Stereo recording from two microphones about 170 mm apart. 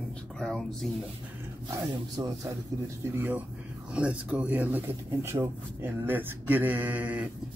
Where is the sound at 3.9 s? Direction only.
5° right (ahead or behind).